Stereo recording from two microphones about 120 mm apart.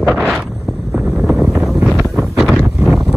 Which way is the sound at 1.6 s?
Centre (ahead or behind).